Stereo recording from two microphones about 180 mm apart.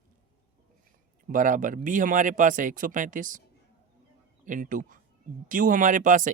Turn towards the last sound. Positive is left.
turn(degrees=-45)  # may be behind; listen again after turning